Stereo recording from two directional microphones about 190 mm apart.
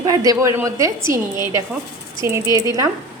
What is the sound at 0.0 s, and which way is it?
A woman's voice, 20° right (ahead or behind).